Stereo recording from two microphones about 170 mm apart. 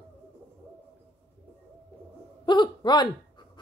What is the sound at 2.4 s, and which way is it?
Speech, 25° left (ahead or behind).